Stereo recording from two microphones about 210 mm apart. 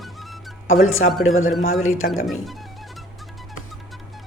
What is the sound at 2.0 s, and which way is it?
Speech, 45° left (ahead or behind).